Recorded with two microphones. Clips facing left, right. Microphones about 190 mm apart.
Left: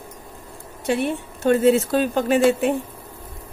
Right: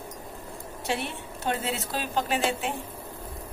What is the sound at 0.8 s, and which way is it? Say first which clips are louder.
Speech: left 9 dB; 50° left (ahead or behind).